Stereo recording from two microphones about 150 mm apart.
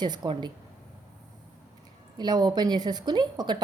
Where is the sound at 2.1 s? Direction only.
25° right (ahead or behind).